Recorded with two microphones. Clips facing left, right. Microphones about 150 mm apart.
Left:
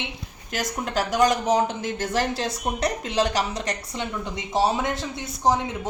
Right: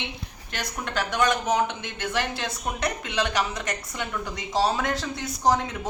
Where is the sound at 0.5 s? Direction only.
40° left (ahead or behind).